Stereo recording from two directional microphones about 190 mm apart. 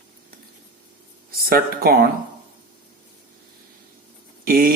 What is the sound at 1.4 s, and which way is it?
Speech, 50° right (ahead or behind).